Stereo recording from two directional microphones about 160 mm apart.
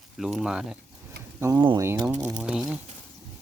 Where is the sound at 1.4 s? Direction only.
25° right (ahead or behind).